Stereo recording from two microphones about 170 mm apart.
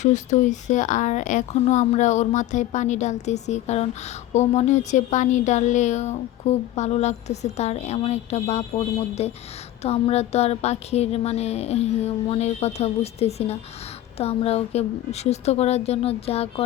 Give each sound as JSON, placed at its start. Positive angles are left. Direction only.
{"t": 0.0, "sound": "speech", "side_deg": 45}
{"t": 9.8, "sound": "music", "side_deg": 40}